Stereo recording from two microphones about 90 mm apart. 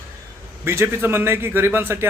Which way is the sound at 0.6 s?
30° right (ahead or behind).